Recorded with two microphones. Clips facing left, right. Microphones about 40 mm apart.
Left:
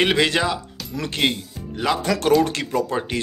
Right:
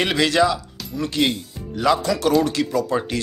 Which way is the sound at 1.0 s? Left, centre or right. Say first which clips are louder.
Right 1 dB; left.